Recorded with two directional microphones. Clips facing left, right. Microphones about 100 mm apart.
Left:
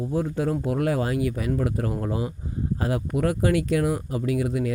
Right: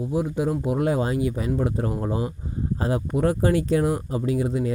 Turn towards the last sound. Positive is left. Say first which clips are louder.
# right 1 dB
turn(degrees=-25)  # may be behind; listen again after turning